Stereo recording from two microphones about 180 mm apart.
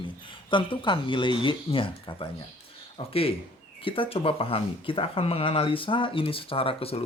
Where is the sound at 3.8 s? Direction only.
30° left (ahead or behind).